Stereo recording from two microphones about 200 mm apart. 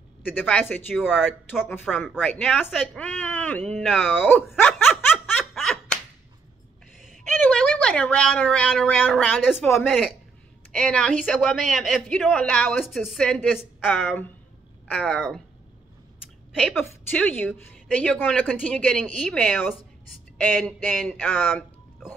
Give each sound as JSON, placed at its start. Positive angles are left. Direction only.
{"t": 0.2, "sound": "speech", "side_deg": 10}
{"t": 4.6, "sound": "laughter", "side_deg": 10}
{"t": 5.4, "sound": "snicker", "side_deg": 0}
{"t": 7.4, "sound": "a man's voice", "side_deg": 5}